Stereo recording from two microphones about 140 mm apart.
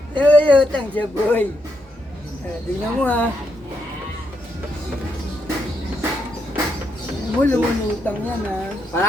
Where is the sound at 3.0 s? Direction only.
10° left (ahead or behind).